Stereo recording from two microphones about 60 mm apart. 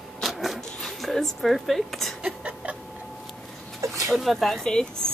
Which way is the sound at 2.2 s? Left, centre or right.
Centre.